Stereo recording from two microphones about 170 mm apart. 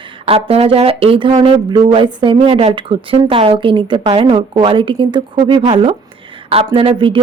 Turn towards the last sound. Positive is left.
turn(degrees=-30)  # may be behind; listen again after turning